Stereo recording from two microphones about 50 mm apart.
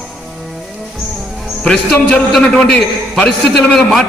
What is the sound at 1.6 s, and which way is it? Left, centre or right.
Speech, centre.